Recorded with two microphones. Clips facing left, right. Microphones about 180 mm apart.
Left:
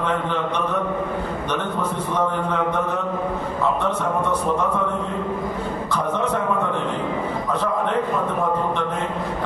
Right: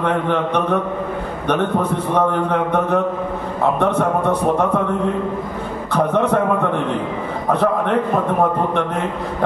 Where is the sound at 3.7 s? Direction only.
60° right (ahead or behind).